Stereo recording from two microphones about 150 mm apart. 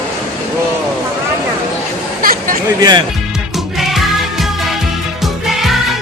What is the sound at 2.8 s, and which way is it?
Speech, 30° right (ahead or behind).